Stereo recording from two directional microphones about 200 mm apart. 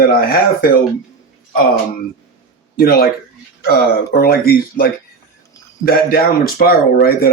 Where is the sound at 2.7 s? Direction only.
50° left (ahead or behind).